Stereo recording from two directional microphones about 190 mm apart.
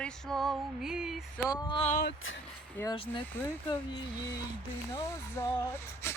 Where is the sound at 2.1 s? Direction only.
90° left.